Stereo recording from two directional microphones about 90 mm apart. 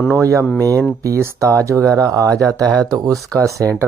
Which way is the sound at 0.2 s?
35° right (ahead or behind).